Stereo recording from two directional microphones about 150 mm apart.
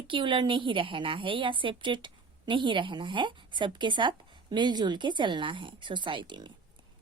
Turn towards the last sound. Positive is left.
turn(degrees=-30)  # may be behind; listen again after turning